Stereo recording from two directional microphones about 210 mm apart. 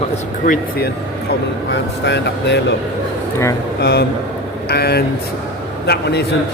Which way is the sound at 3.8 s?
50° left (ahead or behind).